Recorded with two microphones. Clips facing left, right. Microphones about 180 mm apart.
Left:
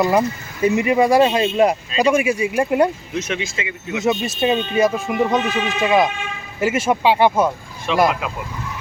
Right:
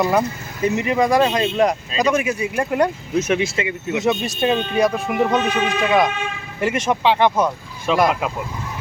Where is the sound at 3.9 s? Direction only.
Centre (ahead or behind).